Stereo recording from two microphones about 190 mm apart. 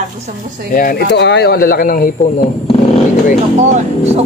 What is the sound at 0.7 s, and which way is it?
Speech, 50° left (ahead or behind).